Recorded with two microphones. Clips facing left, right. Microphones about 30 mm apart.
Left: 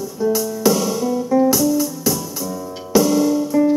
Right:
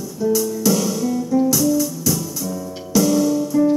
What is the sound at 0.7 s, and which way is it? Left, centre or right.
Music, centre.